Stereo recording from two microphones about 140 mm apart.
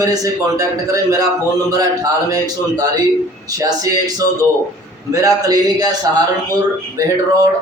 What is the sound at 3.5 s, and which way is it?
A man's voice, 25° right (ahead or behind).